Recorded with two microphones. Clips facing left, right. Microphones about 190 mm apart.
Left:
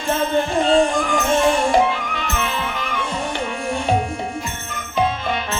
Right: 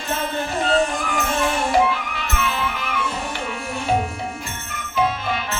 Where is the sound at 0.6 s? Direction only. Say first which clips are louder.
Left 2 dB; 25° left (ahead or behind).